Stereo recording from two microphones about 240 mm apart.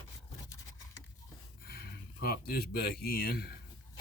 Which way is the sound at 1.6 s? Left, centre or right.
Left.